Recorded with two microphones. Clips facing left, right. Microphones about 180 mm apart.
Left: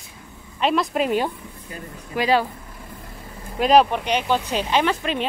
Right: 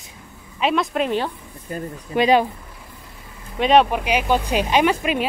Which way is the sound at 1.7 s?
45° right (ahead or behind).